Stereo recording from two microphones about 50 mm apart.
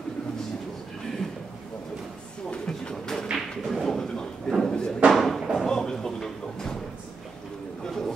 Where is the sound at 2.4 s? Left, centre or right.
Centre.